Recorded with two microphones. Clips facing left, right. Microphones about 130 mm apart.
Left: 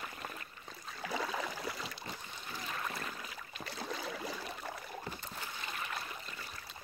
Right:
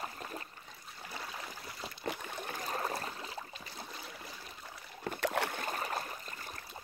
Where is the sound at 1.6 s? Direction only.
90° left.